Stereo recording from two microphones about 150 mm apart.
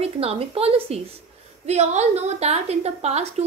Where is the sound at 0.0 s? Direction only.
40° right (ahead or behind).